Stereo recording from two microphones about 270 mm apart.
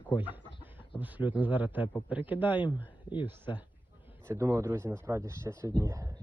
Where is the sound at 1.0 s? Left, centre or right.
Centre.